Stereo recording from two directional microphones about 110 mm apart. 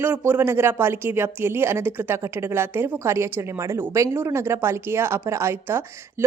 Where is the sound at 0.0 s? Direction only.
20° right (ahead or behind).